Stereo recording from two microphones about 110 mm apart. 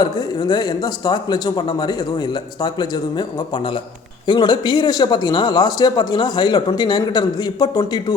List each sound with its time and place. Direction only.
0.0 s speech: 40° left (ahead or behind)